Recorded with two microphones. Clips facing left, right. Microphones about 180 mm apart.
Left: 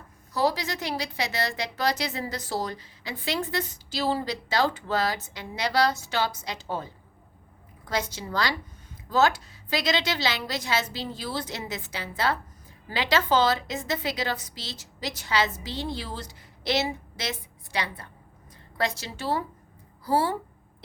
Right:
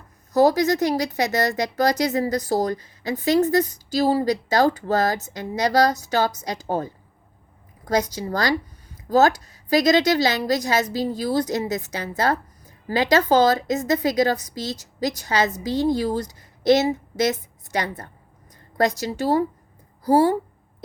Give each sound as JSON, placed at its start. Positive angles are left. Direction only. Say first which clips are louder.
{"t": 0.3, "sound": "a woman's voice", "louder": "right 9 dB", "side_deg": -45}